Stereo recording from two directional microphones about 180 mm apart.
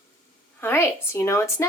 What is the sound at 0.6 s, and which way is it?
A child's voice, 15° left (ahead or behind).